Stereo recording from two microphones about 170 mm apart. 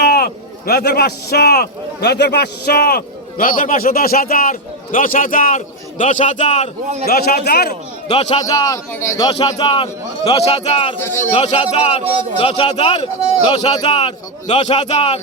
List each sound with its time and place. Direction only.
0.0 s speech: 65° left (ahead or behind); by 6.7 s 40° left (ahead or behind)
7.1 s speech: 65° left (ahead or behind)
8.1 s a man's voice: 40° left (ahead or behind)
8.4 s a man's voice: 20° left (ahead or behind); by 10.9 s 35° left (ahead or behind)
11.0 s a man's voice: 15° left (ahead or behind)
11.3 s a man's voice: 40° left (ahead or behind)